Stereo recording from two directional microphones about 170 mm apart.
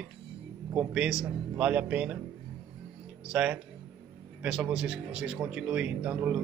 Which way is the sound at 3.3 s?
5° right (ahead or behind).